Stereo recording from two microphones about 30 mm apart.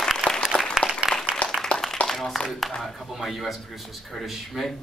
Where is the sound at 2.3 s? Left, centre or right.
Centre.